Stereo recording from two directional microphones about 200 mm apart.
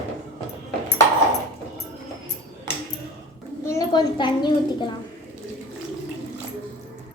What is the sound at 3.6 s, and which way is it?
A child's voice, 15° left (ahead or behind).